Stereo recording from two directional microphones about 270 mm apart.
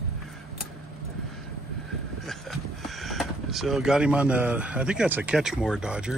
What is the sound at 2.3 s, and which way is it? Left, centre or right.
Speech, centre.